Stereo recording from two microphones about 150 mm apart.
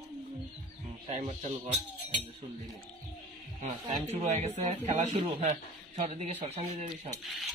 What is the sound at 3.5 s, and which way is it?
Speech, 45° right (ahead or behind).